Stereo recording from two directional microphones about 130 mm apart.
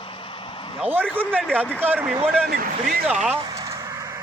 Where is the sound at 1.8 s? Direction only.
15° right (ahead or behind).